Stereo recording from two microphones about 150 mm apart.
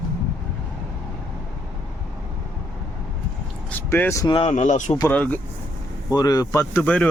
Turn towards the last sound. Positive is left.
turn(degrees=10)  # may be behind; listen again after turning